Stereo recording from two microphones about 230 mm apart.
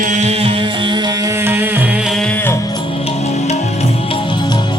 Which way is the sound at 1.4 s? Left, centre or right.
Centre.